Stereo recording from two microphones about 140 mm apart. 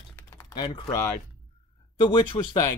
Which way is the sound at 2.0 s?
35° left (ahead or behind).